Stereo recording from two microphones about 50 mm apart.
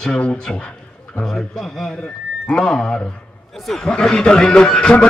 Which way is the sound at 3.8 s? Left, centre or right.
Centre.